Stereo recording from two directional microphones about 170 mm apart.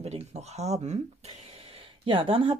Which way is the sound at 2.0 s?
30° right (ahead or behind).